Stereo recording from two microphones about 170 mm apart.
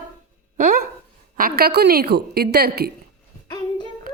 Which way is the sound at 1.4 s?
60° right (ahead or behind).